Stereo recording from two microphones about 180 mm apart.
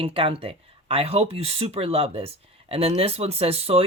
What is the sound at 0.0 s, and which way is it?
Speech, 30° right (ahead or behind).